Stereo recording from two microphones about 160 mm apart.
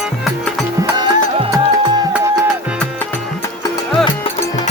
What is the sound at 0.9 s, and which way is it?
Music, 30° right (ahead or behind).